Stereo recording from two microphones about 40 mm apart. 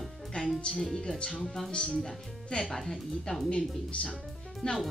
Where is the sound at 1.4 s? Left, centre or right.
Centre.